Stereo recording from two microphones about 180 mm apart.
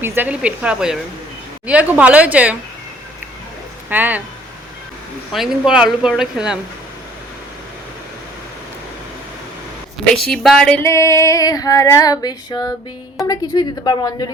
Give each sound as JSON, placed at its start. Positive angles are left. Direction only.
{"t": 0.0, "sound": "a woman's voice", "side_deg": -10}
{"t": 3.8, "sound": "a woman's voice", "side_deg": -10}
{"t": 5.3, "sound": "a woman's voice", "side_deg": 0}
{"t": 10.2, "sound": "female singing", "side_deg": 0}
{"t": 13.2, "sound": "a woman's voice", "side_deg": 20}